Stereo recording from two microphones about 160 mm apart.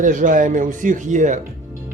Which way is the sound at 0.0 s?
55° right (ahead or behind).